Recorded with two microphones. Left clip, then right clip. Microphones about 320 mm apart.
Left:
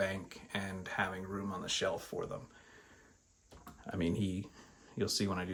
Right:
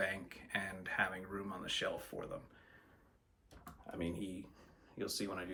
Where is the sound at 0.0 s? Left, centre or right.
Centre.